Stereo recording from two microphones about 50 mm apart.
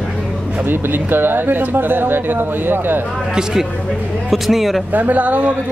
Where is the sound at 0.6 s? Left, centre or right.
Right.